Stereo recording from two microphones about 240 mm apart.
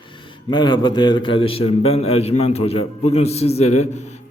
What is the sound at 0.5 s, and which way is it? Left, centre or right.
A man's voice, centre.